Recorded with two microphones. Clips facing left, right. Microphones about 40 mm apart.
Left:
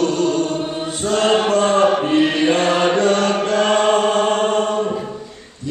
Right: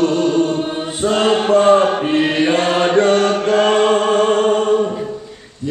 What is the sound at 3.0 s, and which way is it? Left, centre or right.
Chant, right.